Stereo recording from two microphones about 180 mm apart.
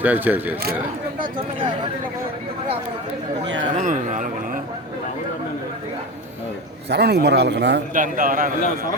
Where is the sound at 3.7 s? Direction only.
45° right (ahead or behind).